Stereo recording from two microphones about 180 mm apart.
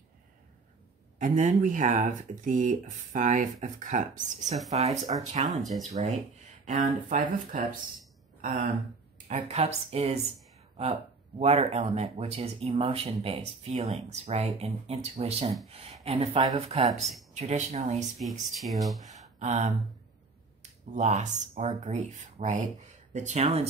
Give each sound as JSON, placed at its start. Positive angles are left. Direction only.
{"t": 1.2, "sound": "speech", "side_deg": -45}
{"t": 5.5, "sound": "speech", "side_deg": 0}
{"t": 6.6, "sound": "speech", "side_deg": -45}
{"t": 9.3, "sound": "speech", "side_deg": -35}
{"t": 18.4, "sound": "speech", "side_deg": 0}
{"t": 19.0, "sound": "a sound", "side_deg": -40}
{"t": 20.9, "sound": "speech", "side_deg": -40}